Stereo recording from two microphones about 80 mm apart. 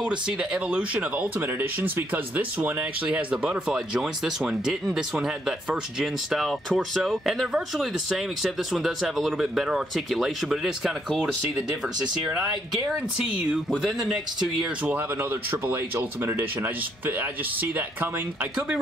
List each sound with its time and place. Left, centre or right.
0.0 s speech: centre
1.4 s speech: right; by 11.6 s centre
13.2 s speech: centre
14.6 s speech: centre